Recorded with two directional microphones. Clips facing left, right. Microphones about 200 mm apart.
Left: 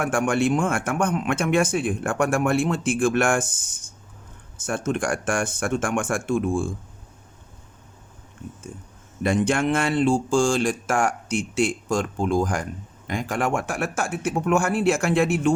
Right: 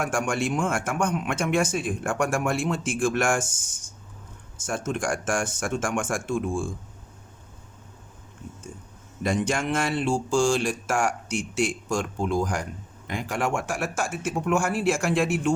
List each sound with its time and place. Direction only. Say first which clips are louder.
0.0 s speech: left 4 dB; 60° left (ahead or behind)
9.2 s speech: left 4 dB; 60° left (ahead or behind)